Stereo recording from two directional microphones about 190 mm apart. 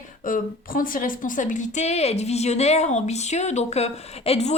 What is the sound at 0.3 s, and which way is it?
A woman's voice, 45° left (ahead or behind).